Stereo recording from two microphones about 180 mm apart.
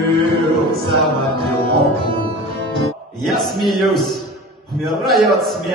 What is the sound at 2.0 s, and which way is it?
Music, 25° right (ahead or behind).